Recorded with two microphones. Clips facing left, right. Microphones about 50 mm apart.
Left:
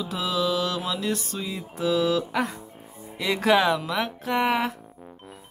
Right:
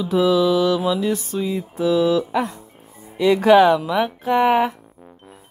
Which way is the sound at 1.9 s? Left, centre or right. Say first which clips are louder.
Right 5 dB; right.